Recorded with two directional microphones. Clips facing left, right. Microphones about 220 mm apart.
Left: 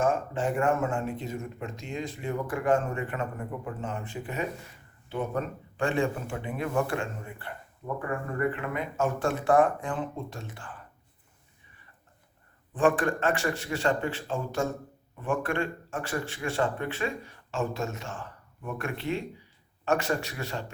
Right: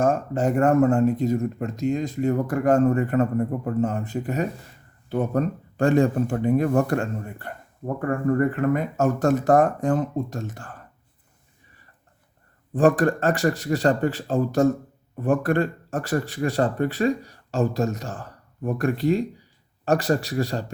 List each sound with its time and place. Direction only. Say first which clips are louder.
0.0 s speech: right 5 dB; 40° right (ahead or behind)
12.7 s speech: right 6 dB; 40° right (ahead or behind)